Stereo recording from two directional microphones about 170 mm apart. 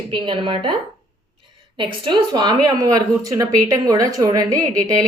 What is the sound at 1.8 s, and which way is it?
A woman's voice, 25° right (ahead or behind).